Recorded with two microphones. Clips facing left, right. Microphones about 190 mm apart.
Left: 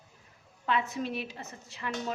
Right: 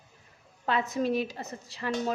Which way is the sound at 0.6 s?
40° right (ahead or behind).